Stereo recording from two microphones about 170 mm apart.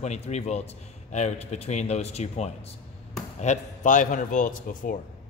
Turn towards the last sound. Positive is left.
turn(degrees=50)  # may be behind; listen again after turning